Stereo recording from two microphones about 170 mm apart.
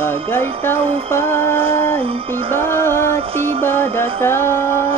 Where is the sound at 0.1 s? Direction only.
10° left (ahead or behind).